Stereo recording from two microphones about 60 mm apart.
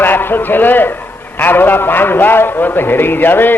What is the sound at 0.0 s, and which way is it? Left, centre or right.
A man's voice, left.